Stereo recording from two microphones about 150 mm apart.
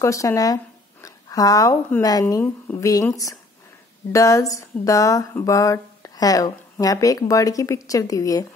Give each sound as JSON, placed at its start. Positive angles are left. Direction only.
{"t": 0.0, "sound": "speech", "side_deg": 20}
{"t": 1.0, "sound": "a sound", "side_deg": 25}
{"t": 2.0, "sound": "speech", "side_deg": 25}
{"t": 4.1, "sound": "speech", "side_deg": 20}